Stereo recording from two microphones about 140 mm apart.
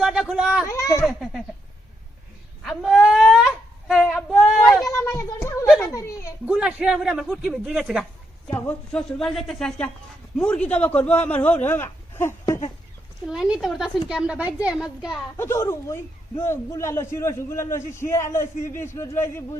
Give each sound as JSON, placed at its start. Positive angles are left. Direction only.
{"t": 0.0, "sound": "speech", "side_deg": -5}
{"t": 0.7, "sound": "a child's voice", "side_deg": 20}
{"t": 1.0, "sound": "a man's voice", "side_deg": 0}
{"t": 2.6, "sound": "a sound", "side_deg": 0}
{"t": 4.8, "sound": "a sound", "side_deg": 25}
{"t": 6.4, "sound": "a man's voice", "side_deg": -10}
{"t": 8.4, "sound": "a man's voice", "side_deg": 15}
{"t": 13.2, "sound": "a man's voice", "side_deg": -5}
{"t": 15.4, "sound": "a man's voice", "side_deg": 20}